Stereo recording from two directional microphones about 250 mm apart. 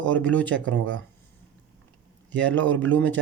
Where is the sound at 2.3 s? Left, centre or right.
Centre.